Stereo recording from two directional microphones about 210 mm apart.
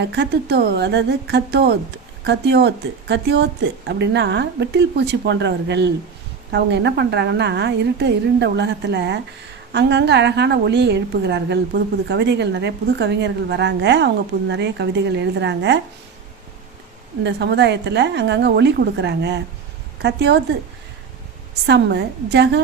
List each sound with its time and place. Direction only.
0.0 s a woman's voice: 50° right (ahead or behind)
17.2 s a woman's voice: 55° right (ahead or behind)
21.7 s speech: 55° right (ahead or behind)